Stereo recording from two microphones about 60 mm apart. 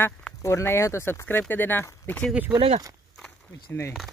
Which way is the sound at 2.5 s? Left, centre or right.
Right.